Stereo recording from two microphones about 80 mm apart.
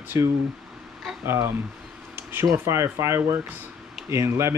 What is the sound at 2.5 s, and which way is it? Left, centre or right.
Speech, right.